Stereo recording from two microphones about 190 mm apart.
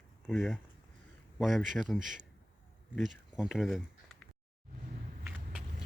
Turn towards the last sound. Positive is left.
turn(degrees=-5)  # may be behind; listen again after turning